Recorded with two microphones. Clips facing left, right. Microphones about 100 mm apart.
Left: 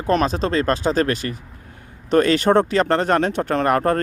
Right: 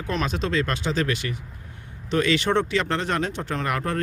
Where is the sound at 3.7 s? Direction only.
45° left (ahead or behind).